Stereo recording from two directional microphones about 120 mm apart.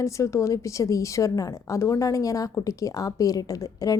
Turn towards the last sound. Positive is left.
turn(degrees=30)  # may be behind; listen again after turning